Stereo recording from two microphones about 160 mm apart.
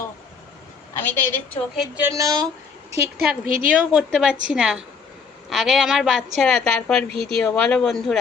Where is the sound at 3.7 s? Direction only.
5° right (ahead or behind).